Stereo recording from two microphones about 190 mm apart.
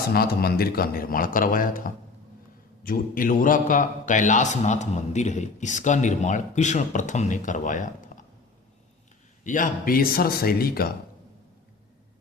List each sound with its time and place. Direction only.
0.1 s a man's voice: 55° left (ahead or behind)
9.4 s a man's voice: 45° left (ahead or behind)